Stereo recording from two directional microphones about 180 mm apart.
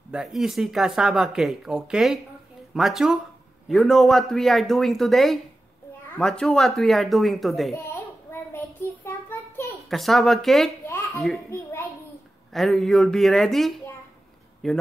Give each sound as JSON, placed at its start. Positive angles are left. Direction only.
{"t": 0.1, "sound": "speech", "side_deg": 0}
{"t": 7.7, "sound": "child singing", "side_deg": 15}
{"t": 9.8, "sound": "speech", "side_deg": 0}
{"t": 10.9, "sound": "babbling", "side_deg": 15}
{"t": 12.5, "sound": "speech", "side_deg": 0}